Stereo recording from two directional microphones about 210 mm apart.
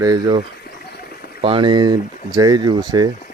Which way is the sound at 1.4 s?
25° right (ahead or behind).